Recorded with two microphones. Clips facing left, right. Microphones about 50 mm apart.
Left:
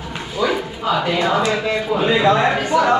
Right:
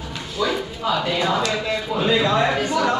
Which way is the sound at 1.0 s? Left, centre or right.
Left.